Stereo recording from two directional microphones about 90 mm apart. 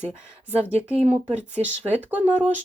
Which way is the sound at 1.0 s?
15° right (ahead or behind).